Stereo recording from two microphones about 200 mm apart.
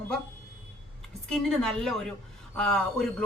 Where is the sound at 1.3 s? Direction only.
5° left (ahead or behind).